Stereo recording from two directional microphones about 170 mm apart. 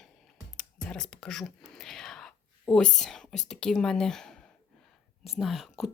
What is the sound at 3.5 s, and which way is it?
Speech, 5° left (ahead or behind).